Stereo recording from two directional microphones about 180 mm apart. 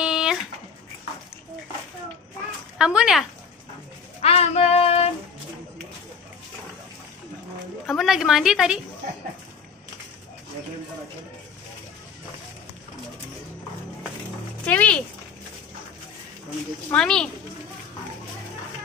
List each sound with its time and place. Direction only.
0.0 s dog: 5° right (ahead or behind)
2.8 s a woman's voice: 5° right (ahead or behind)
4.2 s child singing: 35° left (ahead or behind)
7.8 s a woman's voice: centre (ahead or behind)
14.6 s speech: 5° left (ahead or behind)
16.9 s a woman's voice: 5° left (ahead or behind)